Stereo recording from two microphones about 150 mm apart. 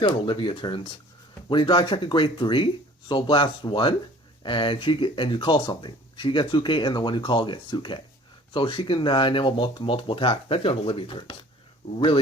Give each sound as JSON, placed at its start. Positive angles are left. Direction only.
{"t": 0.0, "sound": "speech", "side_deg": 35}